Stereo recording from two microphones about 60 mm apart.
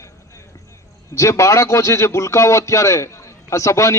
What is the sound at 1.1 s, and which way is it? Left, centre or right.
A man's voice, left.